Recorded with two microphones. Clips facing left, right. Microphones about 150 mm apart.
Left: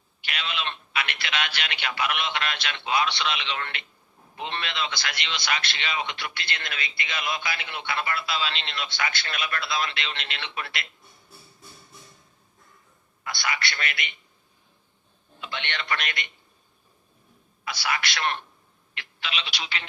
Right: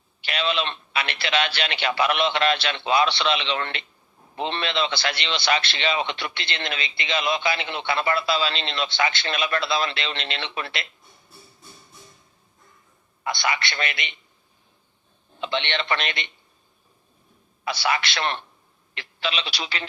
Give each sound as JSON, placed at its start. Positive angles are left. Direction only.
{"t": 0.2, "sound": "a man's voice", "side_deg": -30}
{"t": 13.2, "sound": "a man's voice", "side_deg": -25}
{"t": 15.4, "sound": "a man's voice", "side_deg": -25}
{"t": 17.7, "sound": "a man's voice", "side_deg": -30}